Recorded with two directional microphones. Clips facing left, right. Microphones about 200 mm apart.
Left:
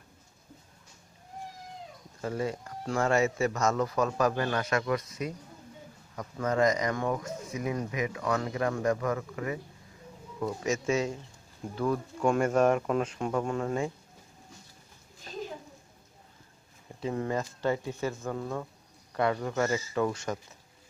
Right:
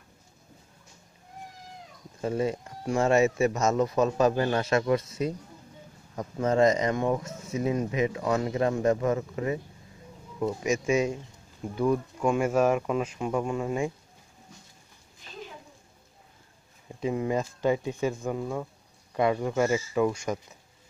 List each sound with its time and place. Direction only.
2.2 s speech: 20° right (ahead or behind)
15.3 s a sound: 40° left (ahead or behind)
17.0 s speech: 15° right (ahead or behind)